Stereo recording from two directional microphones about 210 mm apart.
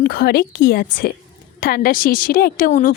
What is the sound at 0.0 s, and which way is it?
A woman's voice, 45° left (ahead or behind).